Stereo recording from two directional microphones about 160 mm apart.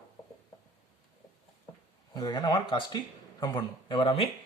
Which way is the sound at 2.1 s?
25° left (ahead or behind).